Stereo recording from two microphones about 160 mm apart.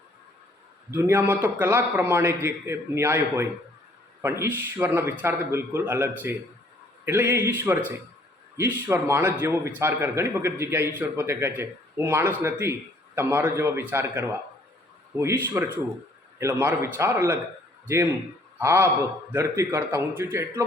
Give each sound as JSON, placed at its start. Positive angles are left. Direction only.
{"t": 0.9, "sound": "a man's voice", "side_deg": -15}